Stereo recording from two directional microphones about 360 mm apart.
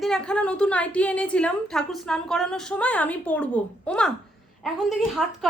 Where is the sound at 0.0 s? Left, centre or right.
Centre.